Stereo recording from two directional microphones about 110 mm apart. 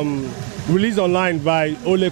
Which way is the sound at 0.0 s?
20° right (ahead or behind).